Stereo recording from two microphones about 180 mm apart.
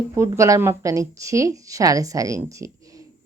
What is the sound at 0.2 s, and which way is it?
A woman's voice, 15° right (ahead or behind).